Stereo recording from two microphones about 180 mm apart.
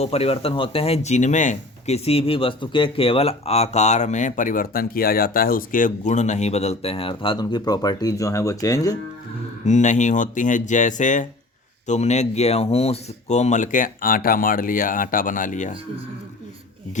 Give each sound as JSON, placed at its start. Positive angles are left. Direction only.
{"t": 0.0, "sound": "speech", "side_deg": 35}
{"t": 9.6, "sound": "speech", "side_deg": 40}